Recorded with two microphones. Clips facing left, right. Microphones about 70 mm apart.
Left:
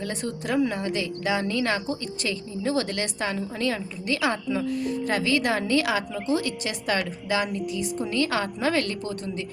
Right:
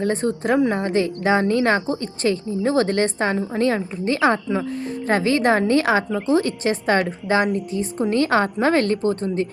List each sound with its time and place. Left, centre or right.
0.0 s a woman's voice: right